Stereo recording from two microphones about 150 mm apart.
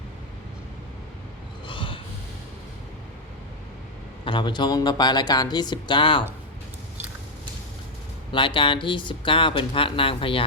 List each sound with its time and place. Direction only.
1.6 s a sound: 35° left (ahead or behind)
4.3 s speech: 35° left (ahead or behind)
8.3 s speech: 35° left (ahead or behind)